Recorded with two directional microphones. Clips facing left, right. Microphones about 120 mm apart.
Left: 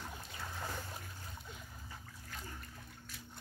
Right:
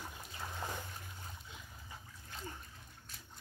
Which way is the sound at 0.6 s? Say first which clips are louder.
Right 1 dB; 20° right (ahead or behind).